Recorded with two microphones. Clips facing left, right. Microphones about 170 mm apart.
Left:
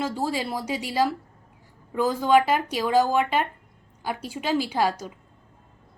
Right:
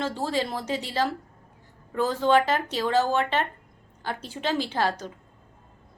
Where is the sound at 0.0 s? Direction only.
10° left (ahead or behind).